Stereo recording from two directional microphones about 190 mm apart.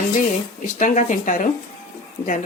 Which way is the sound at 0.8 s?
40° left (ahead or behind).